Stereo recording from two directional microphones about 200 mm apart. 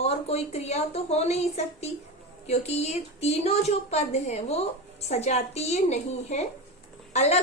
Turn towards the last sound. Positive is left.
turn(degrees=35)  # may be behind; listen again after turning